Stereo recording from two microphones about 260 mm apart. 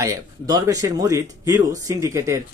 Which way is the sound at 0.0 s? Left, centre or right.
Centre.